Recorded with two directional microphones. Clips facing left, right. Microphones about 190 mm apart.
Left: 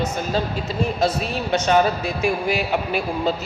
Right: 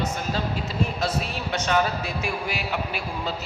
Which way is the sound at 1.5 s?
25° left (ahead or behind).